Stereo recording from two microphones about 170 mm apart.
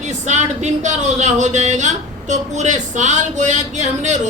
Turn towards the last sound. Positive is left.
turn(degrees=-45)  # may be behind; listen again after turning